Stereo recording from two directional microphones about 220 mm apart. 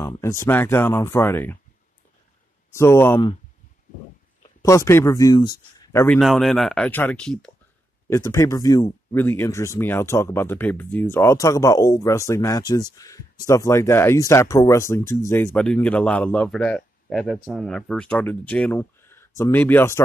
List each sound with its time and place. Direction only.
0.0 s speech: 15° left (ahead or behind)
2.7 s speech: 10° left (ahead or behind)
4.6 s speech: 15° left (ahead or behind)
6.1 s speech: centre (ahead or behind)